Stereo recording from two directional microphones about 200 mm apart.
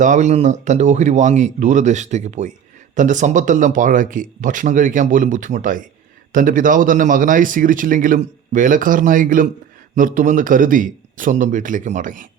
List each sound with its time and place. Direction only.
0.0 s speech: 35° right (ahead or behind)